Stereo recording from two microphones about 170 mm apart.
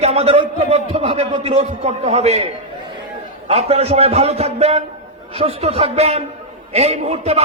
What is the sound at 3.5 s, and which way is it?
A man's voice, 40° right (ahead or behind).